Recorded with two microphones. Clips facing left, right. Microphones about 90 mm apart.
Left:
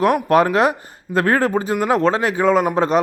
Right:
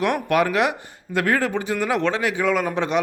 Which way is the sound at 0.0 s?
35° left (ahead or behind).